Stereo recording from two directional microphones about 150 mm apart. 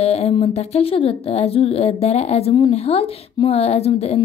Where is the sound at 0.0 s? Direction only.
45° left (ahead or behind).